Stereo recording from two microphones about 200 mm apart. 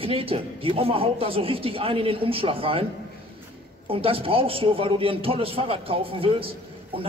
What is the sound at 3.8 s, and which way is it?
A man's voice, 25° right (ahead or behind).